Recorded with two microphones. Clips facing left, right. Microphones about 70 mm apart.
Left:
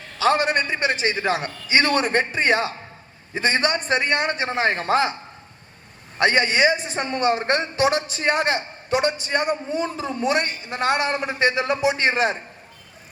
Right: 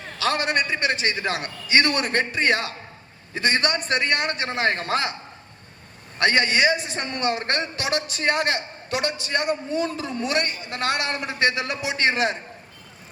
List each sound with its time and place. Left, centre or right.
0.2 s a man's voice: left
6.1 s a man's voice: left